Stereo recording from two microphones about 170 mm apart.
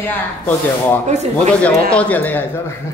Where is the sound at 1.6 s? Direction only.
10° left (ahead or behind).